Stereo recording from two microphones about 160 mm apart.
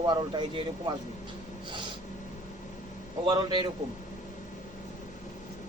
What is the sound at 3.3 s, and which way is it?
Speech, 30° right (ahead or behind).